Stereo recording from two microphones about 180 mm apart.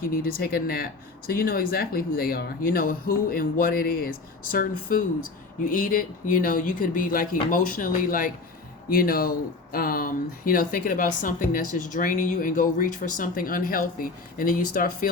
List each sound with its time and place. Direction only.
0.0 s speech: 55° left (ahead or behind)